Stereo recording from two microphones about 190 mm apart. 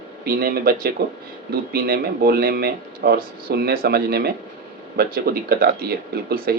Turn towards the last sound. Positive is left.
turn(degrees=-55)  # may be behind; listen again after turning